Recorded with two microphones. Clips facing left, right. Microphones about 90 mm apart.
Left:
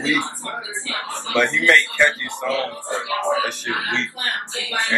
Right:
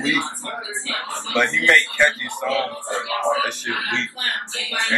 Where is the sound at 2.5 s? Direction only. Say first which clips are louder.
Even; 20° left (ahead or behind).